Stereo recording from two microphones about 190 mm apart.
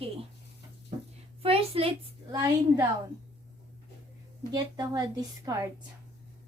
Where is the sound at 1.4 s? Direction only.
30° right (ahead or behind).